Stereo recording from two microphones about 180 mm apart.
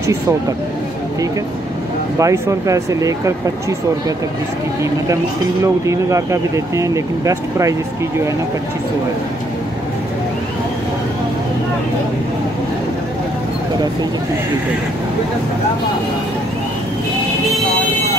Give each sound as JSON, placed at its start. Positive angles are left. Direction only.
{"t": 2.1, "sound": "speech", "side_deg": -15}
{"t": 5.6, "sound": "speech", "side_deg": -15}